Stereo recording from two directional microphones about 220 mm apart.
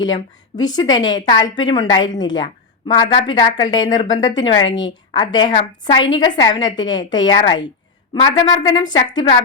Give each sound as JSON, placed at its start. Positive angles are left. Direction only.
{"t": 0.0, "sound": "a woman's voice", "side_deg": 20}
{"t": 3.0, "sound": "speech", "side_deg": 35}
{"t": 3.6, "sound": "a woman's voice", "side_deg": 20}